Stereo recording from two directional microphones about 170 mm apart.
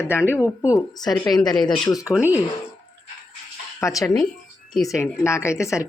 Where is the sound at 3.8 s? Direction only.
20° left (ahead or behind).